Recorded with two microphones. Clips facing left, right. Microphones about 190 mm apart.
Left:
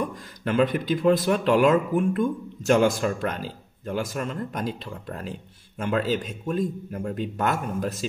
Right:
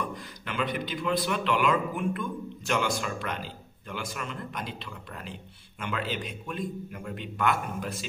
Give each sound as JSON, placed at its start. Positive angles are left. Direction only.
{"t": 0.1, "sound": "speech", "side_deg": 45}